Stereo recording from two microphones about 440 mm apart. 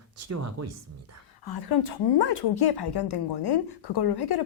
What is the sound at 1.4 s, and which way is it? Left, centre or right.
Speech, left.